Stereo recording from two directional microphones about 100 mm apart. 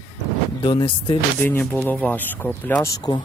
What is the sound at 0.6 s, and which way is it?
Speech, 55° left (ahead or behind).